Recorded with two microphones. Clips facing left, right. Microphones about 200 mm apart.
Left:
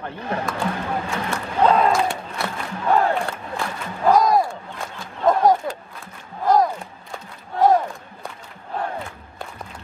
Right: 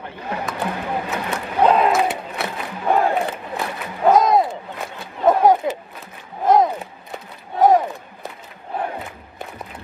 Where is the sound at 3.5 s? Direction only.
20° right (ahead or behind).